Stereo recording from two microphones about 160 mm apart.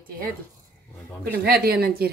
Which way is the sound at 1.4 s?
70° right (ahead or behind).